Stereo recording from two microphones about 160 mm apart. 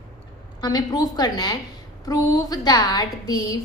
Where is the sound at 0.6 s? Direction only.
25° left (ahead or behind).